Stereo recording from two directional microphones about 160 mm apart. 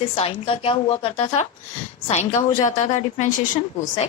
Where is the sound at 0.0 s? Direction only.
35° left (ahead or behind).